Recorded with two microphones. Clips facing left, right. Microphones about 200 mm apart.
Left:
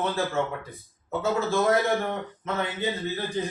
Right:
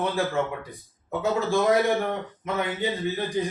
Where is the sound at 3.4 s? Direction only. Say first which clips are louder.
Right 2 dB; 15° right (ahead or behind).